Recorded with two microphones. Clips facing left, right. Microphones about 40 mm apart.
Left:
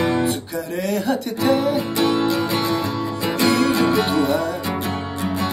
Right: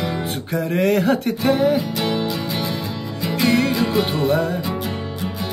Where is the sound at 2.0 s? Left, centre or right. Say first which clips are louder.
Left 3 dB; centre.